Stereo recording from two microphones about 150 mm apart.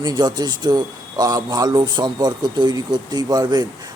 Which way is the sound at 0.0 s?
30° right (ahead or behind).